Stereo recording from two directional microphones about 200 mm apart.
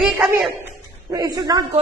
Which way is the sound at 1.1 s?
20° right (ahead or behind).